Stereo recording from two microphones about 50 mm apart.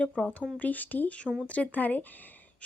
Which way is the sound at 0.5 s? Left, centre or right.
Left.